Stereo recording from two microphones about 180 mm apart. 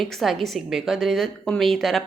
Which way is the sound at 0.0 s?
Centre (ahead or behind).